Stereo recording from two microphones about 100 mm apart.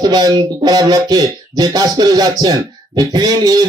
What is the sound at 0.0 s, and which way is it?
Speech, 40° right (ahead or behind).